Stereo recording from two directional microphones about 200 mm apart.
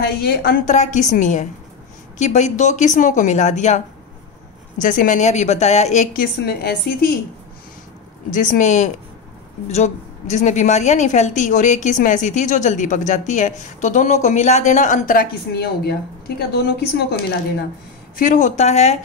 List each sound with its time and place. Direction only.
0.0 s a woman's voice: 50° left (ahead or behind)
4.8 s a woman's voice: 40° left (ahead or behind)
6.1 s a woman's voice: 50° left (ahead or behind)
8.3 s a woman's voice: 40° left (ahead or behind)
18.1 s a woman's voice: 40° left (ahead or behind)